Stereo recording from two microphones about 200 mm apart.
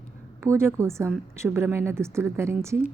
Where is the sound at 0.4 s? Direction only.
15° right (ahead or behind).